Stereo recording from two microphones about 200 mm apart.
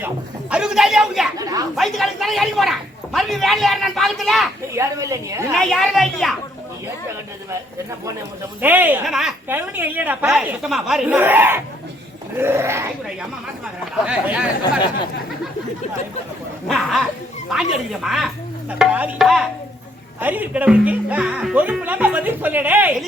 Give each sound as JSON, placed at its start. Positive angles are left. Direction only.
{"t": 0.5, "sound": "speech", "side_deg": -5}
{"t": 1.4, "sound": "a woman's voice", "side_deg": -20}
{"t": 1.7, "sound": "speech", "side_deg": 0}
{"t": 4.7, "sound": "a woman's voice", "side_deg": -15}
{"t": 5.5, "sound": "speech", "side_deg": 0}
{"t": 8.6, "sound": "a woman's voice", "side_deg": -10}
{"t": 14.0, "sound": "speech", "side_deg": -5}
{"t": 16.6, "sound": "a woman's voice", "side_deg": 0}